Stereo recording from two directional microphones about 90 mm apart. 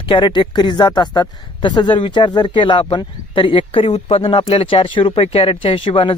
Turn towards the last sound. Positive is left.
turn(degrees=80)